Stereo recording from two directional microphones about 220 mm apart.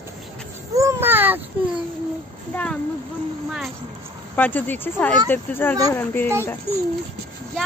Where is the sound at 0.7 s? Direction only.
10° right (ahead or behind).